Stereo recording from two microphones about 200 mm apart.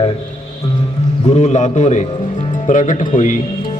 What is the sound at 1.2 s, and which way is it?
A man's voice, 35° left (ahead or behind).